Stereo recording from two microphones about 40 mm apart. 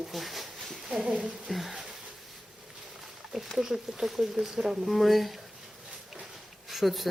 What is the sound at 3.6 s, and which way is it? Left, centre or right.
Speech, centre.